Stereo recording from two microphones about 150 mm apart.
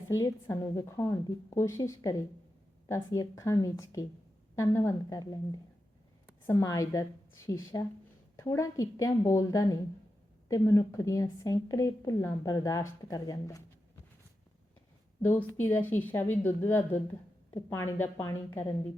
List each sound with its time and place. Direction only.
0.1 s a woman's voice: 20° left (ahead or behind)
15.3 s a woman's voice: 15° left (ahead or behind)